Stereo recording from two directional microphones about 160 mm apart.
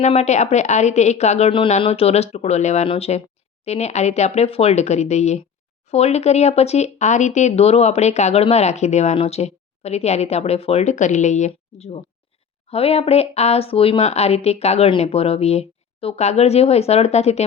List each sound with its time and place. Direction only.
0.0 s speech: 45° left (ahead or behind)